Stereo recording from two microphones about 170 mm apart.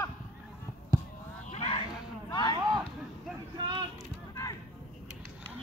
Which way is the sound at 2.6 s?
25° right (ahead or behind).